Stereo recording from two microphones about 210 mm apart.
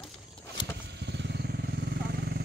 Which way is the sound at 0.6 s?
20° left (ahead or behind).